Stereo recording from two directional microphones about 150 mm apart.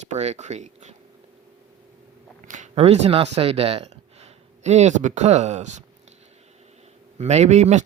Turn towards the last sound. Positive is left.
turn(degrees=-50)  # may be behind; listen again after turning